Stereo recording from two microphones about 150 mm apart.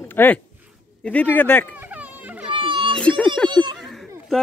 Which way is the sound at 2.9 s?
5° left (ahead or behind).